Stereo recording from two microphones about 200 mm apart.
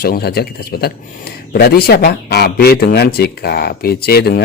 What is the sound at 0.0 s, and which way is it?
Speech, 50° left (ahead or behind).